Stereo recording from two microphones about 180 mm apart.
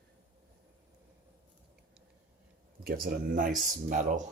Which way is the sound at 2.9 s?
55° right (ahead or behind).